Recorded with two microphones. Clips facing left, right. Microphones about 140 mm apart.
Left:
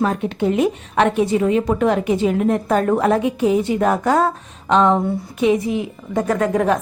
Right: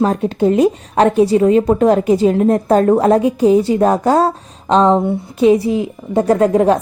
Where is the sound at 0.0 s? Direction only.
35° right (ahead or behind).